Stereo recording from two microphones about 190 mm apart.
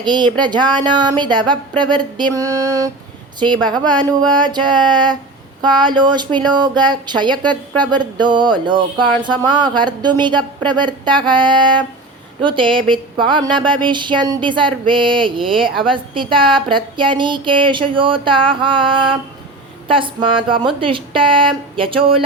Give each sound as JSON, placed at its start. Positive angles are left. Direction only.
{"t": 0.0, "sound": "speech", "side_deg": -25}